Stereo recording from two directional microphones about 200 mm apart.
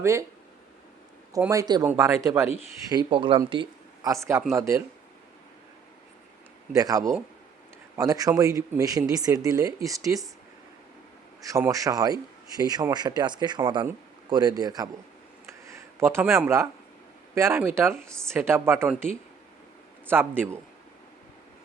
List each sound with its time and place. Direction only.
0.0 s speech: 15° right (ahead or behind)
1.3 s speech: 15° right (ahead or behind)
2.9 s a man's voice: 25° right (ahead or behind)
6.7 s speech: 15° right (ahead or behind)
11.4 s a man's voice: 15° right (ahead or behind)
15.4 s a sound: 15° right (ahead or behind)
17.3 s speech: 15° right (ahead or behind)